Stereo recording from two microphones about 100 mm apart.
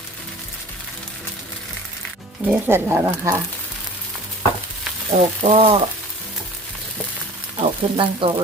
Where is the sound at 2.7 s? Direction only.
25° right (ahead or behind).